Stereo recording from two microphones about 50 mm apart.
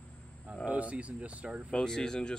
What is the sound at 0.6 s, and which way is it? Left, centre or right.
Speech, right.